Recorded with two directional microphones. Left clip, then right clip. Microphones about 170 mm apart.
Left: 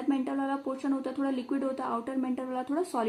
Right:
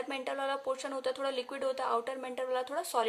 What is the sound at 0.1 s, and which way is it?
Speech, 30° right (ahead or behind).